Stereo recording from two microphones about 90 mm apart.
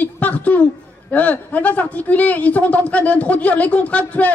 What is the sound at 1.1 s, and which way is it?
Speech, 15° left (ahead or behind).